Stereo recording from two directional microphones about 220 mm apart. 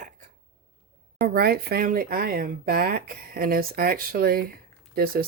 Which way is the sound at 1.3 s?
45° right (ahead or behind).